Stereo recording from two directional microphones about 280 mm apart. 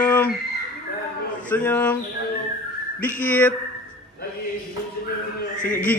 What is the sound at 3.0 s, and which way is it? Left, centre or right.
Speech, centre.